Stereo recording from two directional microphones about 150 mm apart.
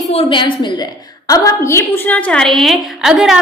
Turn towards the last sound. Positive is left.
turn(degrees=-5)  # may be behind; listen again after turning